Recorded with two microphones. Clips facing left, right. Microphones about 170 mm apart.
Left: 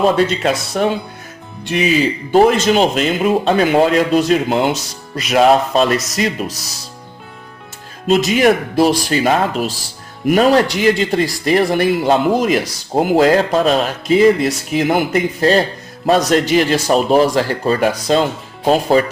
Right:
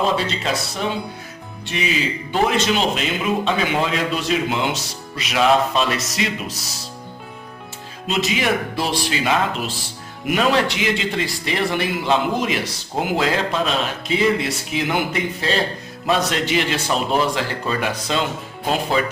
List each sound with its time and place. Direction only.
0.2 s speech: 55° left (ahead or behind)
1.7 s speech: 45° left (ahead or behind)
8.0 s speech: 45° left (ahead or behind)